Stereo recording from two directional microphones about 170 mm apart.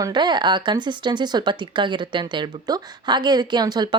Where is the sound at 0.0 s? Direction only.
25° right (ahead or behind).